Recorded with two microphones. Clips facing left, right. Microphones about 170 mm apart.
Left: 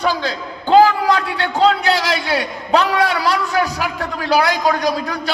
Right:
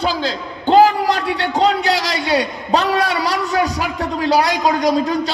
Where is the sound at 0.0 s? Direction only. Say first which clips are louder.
Even; 25° right (ahead or behind).